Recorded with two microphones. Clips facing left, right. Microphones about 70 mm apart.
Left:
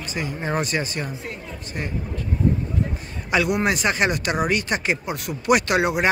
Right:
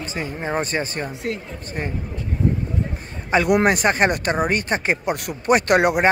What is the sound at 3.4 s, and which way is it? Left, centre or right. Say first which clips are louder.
Speech: right 7 dB; right.